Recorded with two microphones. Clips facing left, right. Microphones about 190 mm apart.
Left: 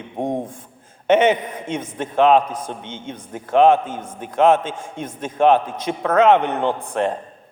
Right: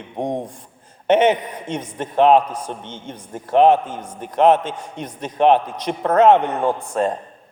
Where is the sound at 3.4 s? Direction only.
50° left (ahead or behind).